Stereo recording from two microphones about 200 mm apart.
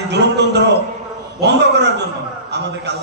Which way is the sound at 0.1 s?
60° right (ahead or behind).